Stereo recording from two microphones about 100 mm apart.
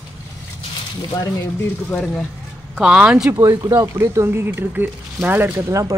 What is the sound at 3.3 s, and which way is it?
Speech, 35° right (ahead or behind).